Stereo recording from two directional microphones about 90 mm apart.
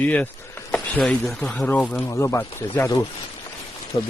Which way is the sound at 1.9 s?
30° left (ahead or behind).